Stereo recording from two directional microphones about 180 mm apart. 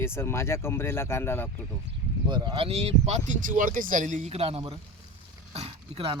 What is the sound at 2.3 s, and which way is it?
Speech, 25° right (ahead or behind).